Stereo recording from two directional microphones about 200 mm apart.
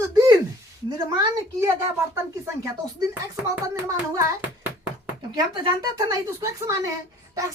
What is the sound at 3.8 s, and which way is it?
Speech, 15° right (ahead or behind).